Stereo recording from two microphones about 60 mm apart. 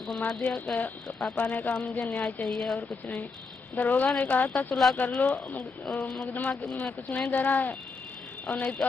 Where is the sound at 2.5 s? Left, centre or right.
Centre.